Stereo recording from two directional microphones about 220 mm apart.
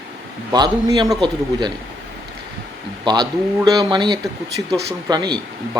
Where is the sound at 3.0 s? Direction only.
20° right (ahead or behind).